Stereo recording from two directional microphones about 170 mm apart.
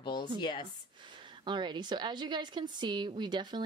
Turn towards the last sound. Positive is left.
turn(degrees=-25)  # may be behind; listen again after turning